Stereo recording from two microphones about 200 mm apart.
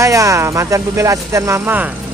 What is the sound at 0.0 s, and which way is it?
Speech, 15° right (ahead or behind).